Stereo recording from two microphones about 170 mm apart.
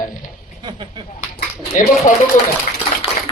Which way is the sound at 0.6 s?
25° right (ahead or behind).